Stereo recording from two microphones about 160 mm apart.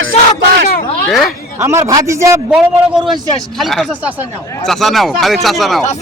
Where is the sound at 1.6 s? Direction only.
15° right (ahead or behind).